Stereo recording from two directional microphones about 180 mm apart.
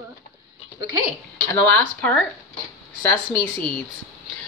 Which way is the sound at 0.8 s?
20° right (ahead or behind).